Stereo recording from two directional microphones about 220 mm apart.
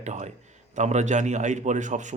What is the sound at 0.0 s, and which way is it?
A man's voice, 30° right (ahead or behind).